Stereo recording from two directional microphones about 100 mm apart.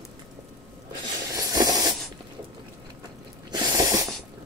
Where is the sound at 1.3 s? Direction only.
40° right (ahead or behind).